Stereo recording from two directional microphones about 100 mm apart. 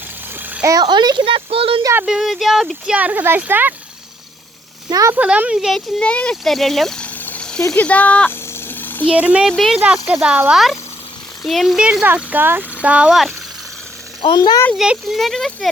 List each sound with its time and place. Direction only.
0.8 s speech: 45° right (ahead or behind); by 1.8 s 70° right (ahead or behind)
2.0 s speech: 5° right (ahead or behind)
4.9 s speech: 35° right (ahead or behind)
5.1 s speech: 15° right (ahead or behind)
6.0 s speech: 10° left (ahead or behind)
8.5 s a sound: 20° left (ahead or behind)
9.0 s speech: 15° right (ahead or behind)
9.5 s speech: centre (ahead or behind)
10.2 s speech: 10° right (ahead or behind)
11.4 s speech: centre (ahead or behind)
12.0 s speech: 20° right (ahead or behind)
14.3 s speech: 40° left (ahead or behind)
14.8 s speech: 5° right (ahead or behind)